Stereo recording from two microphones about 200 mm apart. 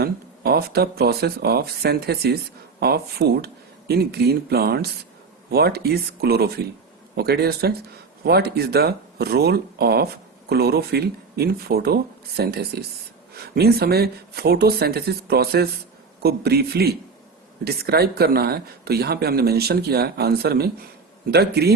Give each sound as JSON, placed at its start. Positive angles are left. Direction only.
{"t": 0.0, "sound": "speech", "side_deg": -50}